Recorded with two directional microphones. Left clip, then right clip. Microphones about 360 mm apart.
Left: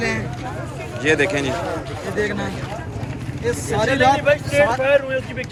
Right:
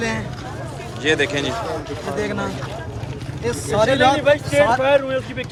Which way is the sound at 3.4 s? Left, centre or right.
Right.